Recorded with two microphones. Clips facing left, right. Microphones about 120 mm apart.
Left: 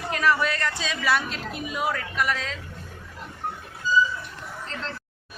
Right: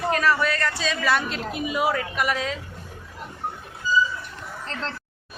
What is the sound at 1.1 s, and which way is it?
A woman's voice, centre (ahead or behind).